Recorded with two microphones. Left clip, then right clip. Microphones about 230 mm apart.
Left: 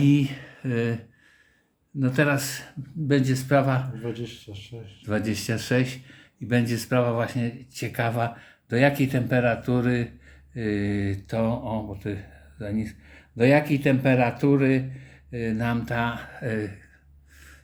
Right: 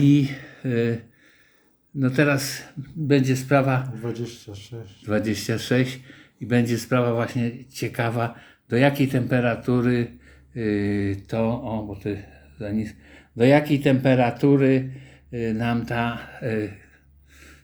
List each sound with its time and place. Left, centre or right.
0.0 s speech: centre
4.2 s speech: right
5.0 s speech: centre